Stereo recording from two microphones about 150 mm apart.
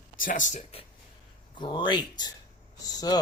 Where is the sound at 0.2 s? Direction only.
60° left (ahead or behind).